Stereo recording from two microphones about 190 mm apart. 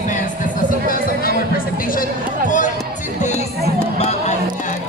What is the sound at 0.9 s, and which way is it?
Music, 45° left (ahead or behind).